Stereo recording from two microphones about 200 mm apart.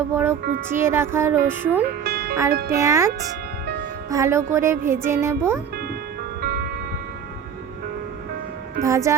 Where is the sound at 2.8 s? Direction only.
15° right (ahead or behind).